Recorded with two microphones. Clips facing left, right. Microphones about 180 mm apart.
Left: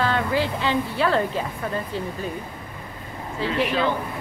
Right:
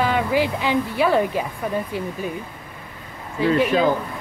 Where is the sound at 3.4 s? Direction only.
45° right (ahead or behind).